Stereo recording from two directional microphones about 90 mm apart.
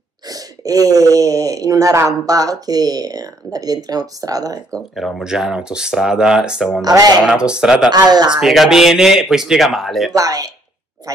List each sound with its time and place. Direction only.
0.3 s speech: 40° right (ahead or behind)
4.9 s speech: centre (ahead or behind)
6.8 s speech: 45° right (ahead or behind)
7.2 s speech: 10° right (ahead or behind)
7.9 s speech: 50° right (ahead or behind)
8.4 s speech: 5° right (ahead or behind)
10.1 s speech: 40° right (ahead or behind)